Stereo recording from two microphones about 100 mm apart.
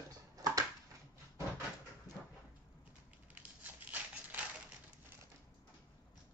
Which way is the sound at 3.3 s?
15° right (ahead or behind).